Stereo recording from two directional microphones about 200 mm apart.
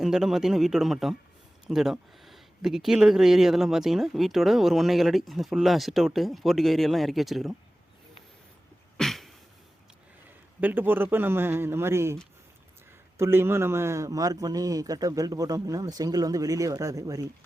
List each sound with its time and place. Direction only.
0.0 s speech: centre (ahead or behind)
9.0 s a sound: centre (ahead or behind)
10.6 s a man's voice: 10° right (ahead or behind)
13.1 s a man's voice: 10° right (ahead or behind)